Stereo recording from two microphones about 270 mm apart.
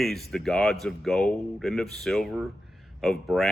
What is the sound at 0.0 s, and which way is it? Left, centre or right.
Speech, centre.